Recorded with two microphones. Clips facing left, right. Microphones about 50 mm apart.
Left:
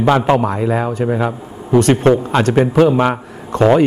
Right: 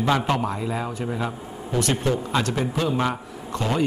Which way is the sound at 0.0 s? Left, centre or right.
Left.